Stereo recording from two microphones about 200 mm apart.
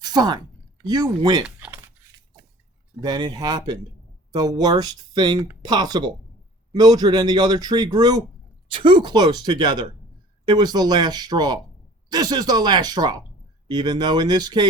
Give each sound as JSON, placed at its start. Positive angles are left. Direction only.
{"t": 0.0, "sound": "a sound", "side_deg": -20}
{"t": 0.9, "sound": "speech", "side_deg": -20}
{"t": 1.5, "sound": "typing", "side_deg": -5}
{"t": 3.0, "sound": "speech", "side_deg": -20}